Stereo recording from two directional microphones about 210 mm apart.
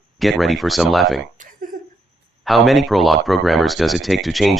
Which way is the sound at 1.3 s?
40° right (ahead or behind).